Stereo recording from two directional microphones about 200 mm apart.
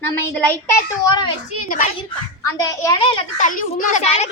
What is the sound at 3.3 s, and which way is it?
Speech, 40° left (ahead or behind).